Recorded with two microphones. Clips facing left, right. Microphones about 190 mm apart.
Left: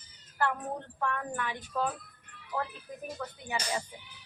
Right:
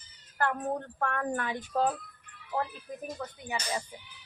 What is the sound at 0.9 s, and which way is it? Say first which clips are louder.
Speech: right 2 dB; 55° right (ahead or behind).